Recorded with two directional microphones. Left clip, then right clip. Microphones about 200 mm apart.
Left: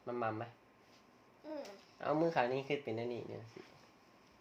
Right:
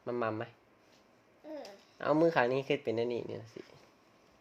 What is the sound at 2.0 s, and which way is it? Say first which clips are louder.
Speech: right 6 dB; 60° right (ahead or behind).